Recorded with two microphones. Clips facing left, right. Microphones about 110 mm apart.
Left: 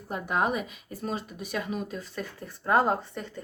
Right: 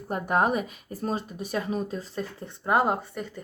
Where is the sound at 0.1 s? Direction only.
45° right (ahead or behind).